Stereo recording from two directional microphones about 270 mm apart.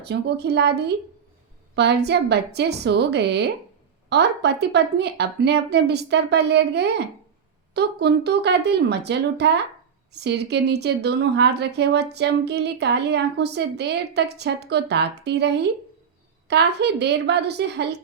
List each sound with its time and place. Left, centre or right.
0.0 s a woman's voice: right